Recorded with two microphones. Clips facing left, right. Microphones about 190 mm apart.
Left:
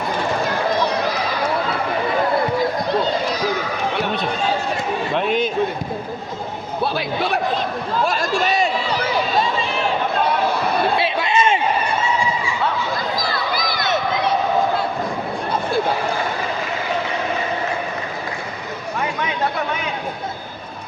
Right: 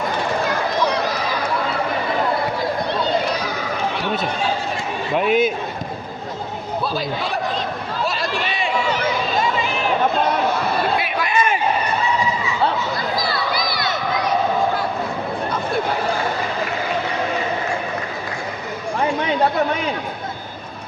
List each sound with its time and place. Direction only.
5.1 s a man's voice: 5° right (ahead or behind)
6.8 s a man's voice: 65° left (ahead or behind)
8.0 s chatter: 45° left (ahead or behind)
10.9 s a sound: 25° left (ahead or behind)